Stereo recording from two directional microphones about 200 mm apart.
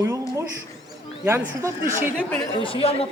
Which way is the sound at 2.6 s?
30° left (ahead or behind).